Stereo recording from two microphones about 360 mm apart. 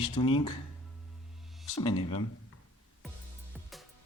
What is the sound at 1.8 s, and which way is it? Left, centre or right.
Speech, centre.